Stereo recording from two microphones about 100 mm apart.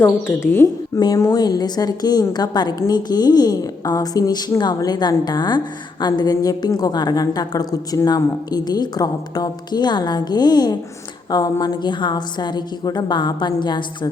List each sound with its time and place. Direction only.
0.0 s a woman's voice: 25° left (ahead or behind)
0.9 s a woman's voice: 40° left (ahead or behind)